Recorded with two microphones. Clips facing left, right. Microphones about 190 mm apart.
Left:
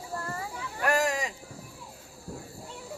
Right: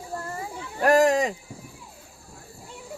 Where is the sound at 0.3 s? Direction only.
25° right (ahead or behind).